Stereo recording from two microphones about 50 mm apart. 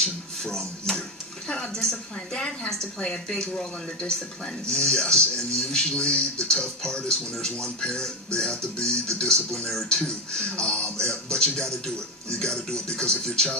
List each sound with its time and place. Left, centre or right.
0.4 s a woman's voice: centre